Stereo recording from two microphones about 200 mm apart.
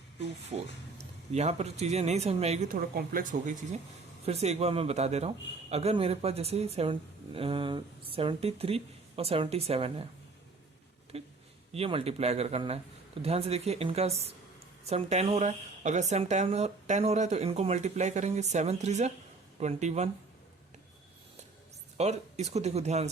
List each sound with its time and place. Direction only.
0.5 s speech: 35° right (ahead or behind)
11.1 s speech: 30° right (ahead or behind)
21.9 s speech: 35° right (ahead or behind)